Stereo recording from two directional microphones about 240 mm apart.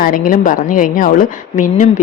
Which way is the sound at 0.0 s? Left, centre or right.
Left.